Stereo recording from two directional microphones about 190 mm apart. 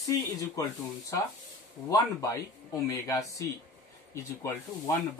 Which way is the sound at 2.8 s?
15° left (ahead or behind).